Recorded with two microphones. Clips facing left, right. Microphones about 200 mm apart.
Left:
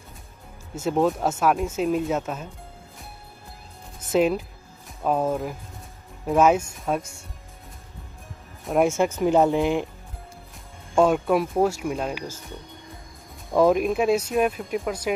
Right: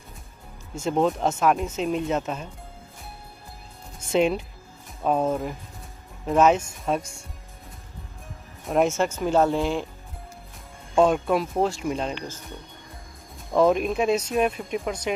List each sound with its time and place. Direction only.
0.7 s speech: 5° left (ahead or behind)
4.1 s speech: centre (ahead or behind)
8.6 s speech: 10° left (ahead or behind)
11.0 s speech: 5° left (ahead or behind)
13.5 s speech: 5° left (ahead or behind)